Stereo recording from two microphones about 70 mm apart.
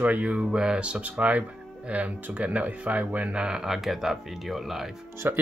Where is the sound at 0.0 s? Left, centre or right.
Centre.